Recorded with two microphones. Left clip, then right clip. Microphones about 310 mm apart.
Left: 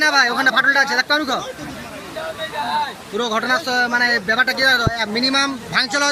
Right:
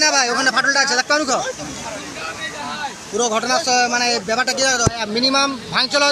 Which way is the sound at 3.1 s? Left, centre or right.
Centre.